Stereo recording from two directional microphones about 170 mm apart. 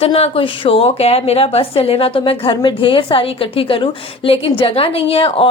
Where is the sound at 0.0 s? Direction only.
35° left (ahead or behind).